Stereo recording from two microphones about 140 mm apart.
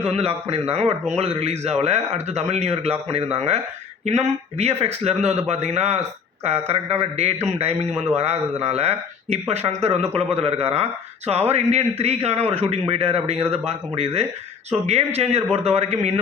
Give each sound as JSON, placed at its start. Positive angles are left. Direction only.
{"t": 0.1, "sound": "speech", "side_deg": -45}